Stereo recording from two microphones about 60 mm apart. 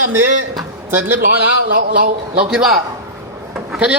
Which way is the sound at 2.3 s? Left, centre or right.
Right.